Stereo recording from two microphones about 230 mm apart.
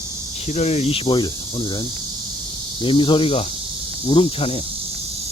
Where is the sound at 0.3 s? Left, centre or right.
Left.